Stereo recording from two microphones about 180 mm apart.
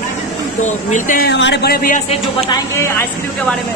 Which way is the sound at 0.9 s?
45° left (ahead or behind).